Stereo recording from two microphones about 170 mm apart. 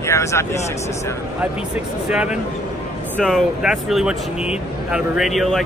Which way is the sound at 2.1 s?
5° right (ahead or behind).